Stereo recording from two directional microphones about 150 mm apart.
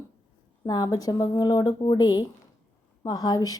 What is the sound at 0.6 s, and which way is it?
Speech, 25° left (ahead or behind).